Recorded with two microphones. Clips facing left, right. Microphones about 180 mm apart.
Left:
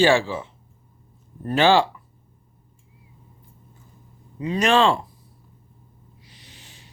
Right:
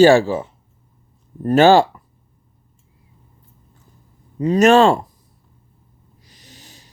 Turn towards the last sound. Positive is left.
turn(degrees=-40)  # may be behind; listen again after turning